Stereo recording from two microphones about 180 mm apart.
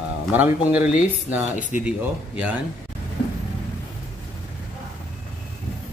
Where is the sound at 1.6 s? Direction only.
45° left (ahead or behind).